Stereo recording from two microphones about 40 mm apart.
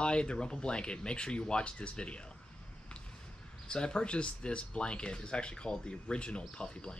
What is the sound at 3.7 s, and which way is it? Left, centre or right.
Speech, left.